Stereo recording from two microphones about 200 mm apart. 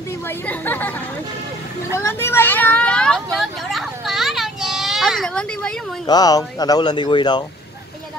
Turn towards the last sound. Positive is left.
turn(degrees=20)  # may be behind; listen again after turning